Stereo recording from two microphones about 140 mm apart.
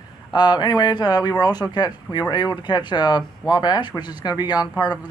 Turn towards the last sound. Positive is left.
turn(degrees=30)  # may be behind; listen again after turning